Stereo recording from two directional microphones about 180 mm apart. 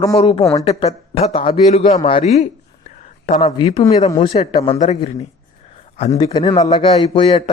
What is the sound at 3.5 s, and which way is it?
A man's voice, 25° left (ahead or behind).